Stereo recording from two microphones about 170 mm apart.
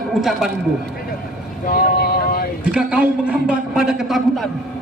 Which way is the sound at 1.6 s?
60° left (ahead or behind).